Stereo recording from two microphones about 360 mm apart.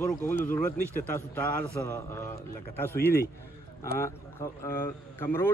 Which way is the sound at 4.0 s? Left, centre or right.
Centre.